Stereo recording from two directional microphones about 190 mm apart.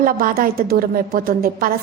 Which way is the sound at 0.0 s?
50° right (ahead or behind).